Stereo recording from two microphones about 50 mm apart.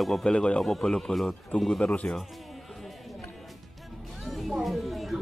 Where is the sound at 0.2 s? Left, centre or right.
Centre.